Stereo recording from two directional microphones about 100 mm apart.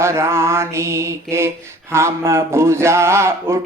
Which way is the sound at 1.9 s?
25° right (ahead or behind).